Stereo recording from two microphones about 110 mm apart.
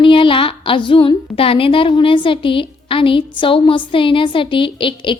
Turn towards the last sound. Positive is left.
turn(degrees=50)  # may be behind; listen again after turning